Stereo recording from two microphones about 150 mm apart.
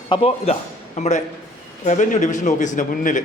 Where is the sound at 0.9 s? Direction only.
50° left (ahead or behind).